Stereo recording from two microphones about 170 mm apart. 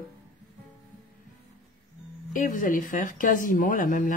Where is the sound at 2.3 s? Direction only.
50° left (ahead or behind).